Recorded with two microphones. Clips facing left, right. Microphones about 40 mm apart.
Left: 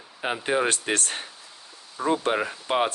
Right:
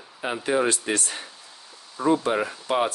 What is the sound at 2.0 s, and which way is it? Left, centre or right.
Speech, centre.